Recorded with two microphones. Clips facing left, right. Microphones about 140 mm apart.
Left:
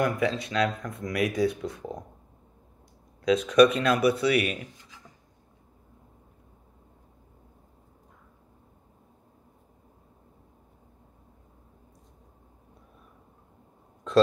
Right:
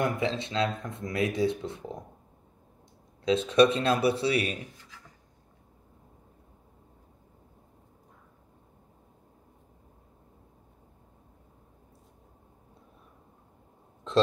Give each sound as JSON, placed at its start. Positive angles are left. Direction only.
{"t": 0.0, "sound": "speech", "side_deg": -25}
{"t": 3.3, "sound": "speech", "side_deg": -25}
{"t": 4.7, "sound": "writing", "side_deg": 20}